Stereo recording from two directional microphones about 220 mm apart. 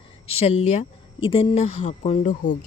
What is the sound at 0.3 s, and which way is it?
A woman's voice, 30° left (ahead or behind).